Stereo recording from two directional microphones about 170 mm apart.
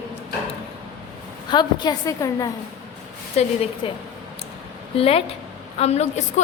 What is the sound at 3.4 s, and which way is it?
A woman's voice, 40° left (ahead or behind).